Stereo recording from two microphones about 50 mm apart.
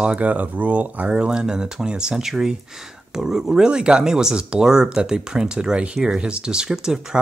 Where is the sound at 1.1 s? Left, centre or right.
Centre.